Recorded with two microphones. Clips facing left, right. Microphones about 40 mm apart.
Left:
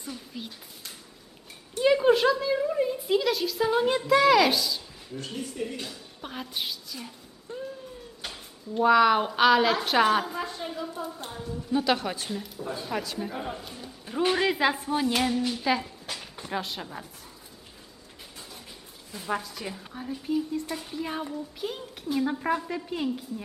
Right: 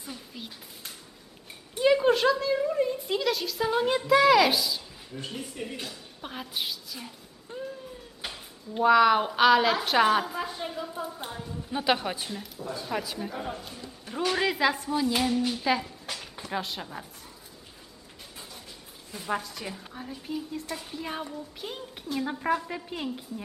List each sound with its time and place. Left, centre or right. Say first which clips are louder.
0.0 s a sound: left 2 dB; centre
5.2 s a woman's voice: left 3 dB; centre
7.5 s music: left 1 dB; right
8.2 s a sound: right 1 dB; centre
8.8 s a woman's voice: even; centre
11.3 s a sound: left 1 dB; centre
11.7 s a woman's voice: left 1 dB; centre
14.6 s speech: even; centre
15.3 s speech: even; centre
19.1 s a woman's voice: even; centre